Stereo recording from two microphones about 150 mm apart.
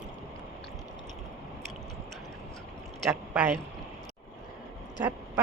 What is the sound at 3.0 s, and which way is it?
Speech, 10° right (ahead or behind).